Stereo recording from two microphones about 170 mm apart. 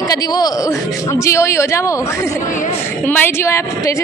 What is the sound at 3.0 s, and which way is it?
Speech, 10° left (ahead or behind).